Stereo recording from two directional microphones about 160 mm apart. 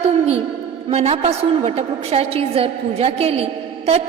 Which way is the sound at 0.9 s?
40° right (ahead or behind).